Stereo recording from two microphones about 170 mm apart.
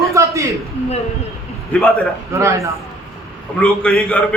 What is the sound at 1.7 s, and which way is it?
Speech, 10° left (ahead or behind).